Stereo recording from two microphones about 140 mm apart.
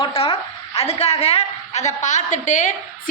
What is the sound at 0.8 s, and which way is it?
A woman's voice, 45° left (ahead or behind).